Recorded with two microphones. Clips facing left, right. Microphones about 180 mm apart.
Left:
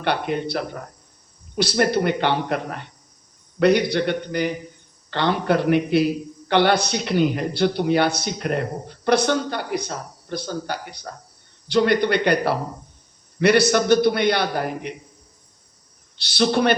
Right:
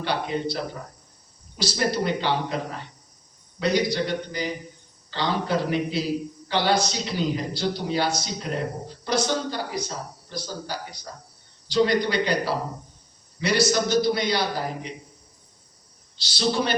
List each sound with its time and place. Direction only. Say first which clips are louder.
0.0 s a man's voice: left 3 dB; 60° left (ahead or behind)
16.1 s a man's voice: left 5 dB; 60° left (ahead or behind)